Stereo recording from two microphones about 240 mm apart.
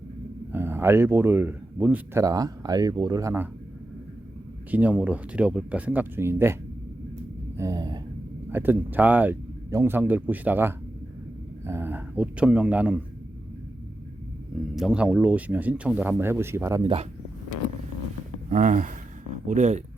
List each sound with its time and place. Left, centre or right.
0.5 s speech: centre
4.7 s speech: centre
7.5 s a sound: centre
8.4 s speech: centre
14.8 s speech: centre; by 17.1 s right
18.5 s speech: right